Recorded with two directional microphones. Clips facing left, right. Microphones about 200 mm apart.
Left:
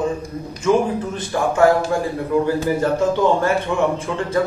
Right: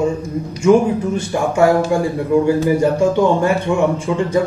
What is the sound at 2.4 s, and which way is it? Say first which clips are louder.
A man's voice: right 4 dB; 15° right (ahead or behind).